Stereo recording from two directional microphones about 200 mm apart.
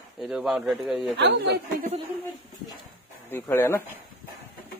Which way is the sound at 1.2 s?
60° right (ahead or behind).